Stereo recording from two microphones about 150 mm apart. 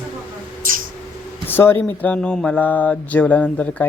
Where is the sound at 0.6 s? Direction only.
65° right (ahead or behind).